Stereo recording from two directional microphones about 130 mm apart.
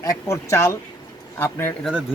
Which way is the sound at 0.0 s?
20° left (ahead or behind).